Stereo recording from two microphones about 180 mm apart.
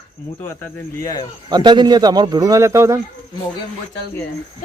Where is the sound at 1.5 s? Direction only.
25° right (ahead or behind).